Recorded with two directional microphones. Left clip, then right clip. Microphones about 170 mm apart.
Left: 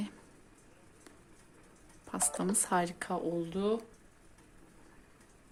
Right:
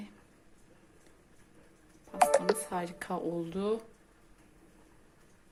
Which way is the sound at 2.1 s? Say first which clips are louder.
Right 10 dB; 30° left (ahead or behind).